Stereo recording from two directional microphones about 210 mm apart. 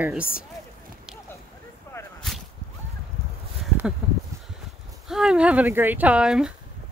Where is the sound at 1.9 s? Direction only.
10° left (ahead or behind).